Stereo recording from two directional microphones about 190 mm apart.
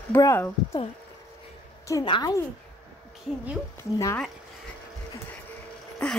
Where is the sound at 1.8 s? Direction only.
20° left (ahead or behind).